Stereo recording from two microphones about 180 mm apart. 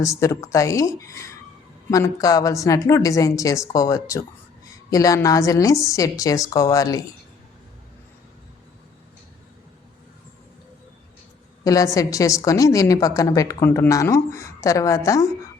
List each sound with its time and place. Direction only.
0.0 s a woman's voice: 20° left (ahead or behind)
11.6 s a woman's voice: 20° left (ahead or behind)